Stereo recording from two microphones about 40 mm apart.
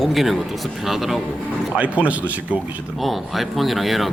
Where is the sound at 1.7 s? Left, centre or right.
Right.